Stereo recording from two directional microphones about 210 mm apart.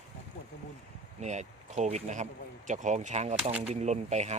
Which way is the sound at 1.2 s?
35° right (ahead or behind).